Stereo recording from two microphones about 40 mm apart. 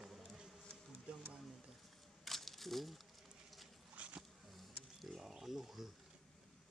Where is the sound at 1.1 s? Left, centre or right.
Right.